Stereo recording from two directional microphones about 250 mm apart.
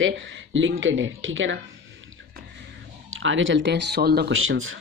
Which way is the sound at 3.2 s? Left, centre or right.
Right.